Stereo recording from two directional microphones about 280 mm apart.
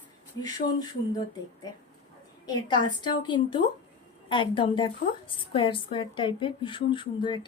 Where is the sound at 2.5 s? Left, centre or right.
Centre.